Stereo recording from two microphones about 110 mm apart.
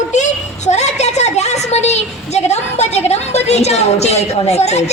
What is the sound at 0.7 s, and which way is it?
A woman's voice, 90° left.